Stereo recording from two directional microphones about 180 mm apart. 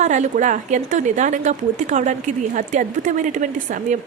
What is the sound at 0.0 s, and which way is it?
Speech, 40° right (ahead or behind).